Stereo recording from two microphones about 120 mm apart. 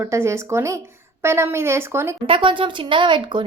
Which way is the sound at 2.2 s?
45° right (ahead or behind).